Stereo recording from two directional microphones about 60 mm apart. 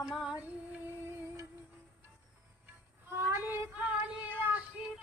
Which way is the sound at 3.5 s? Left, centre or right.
Right.